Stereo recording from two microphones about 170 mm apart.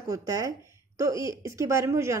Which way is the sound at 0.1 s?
20° right (ahead or behind).